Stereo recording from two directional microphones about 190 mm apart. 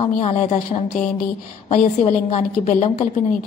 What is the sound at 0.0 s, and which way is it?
A woman's voice, 30° left (ahead or behind).